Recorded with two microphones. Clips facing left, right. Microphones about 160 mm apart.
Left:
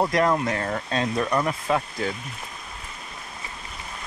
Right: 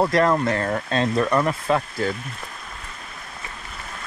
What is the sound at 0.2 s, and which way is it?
Speech, 5° left (ahead or behind).